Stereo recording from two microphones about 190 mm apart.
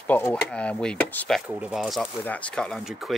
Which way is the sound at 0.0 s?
10° left (ahead or behind).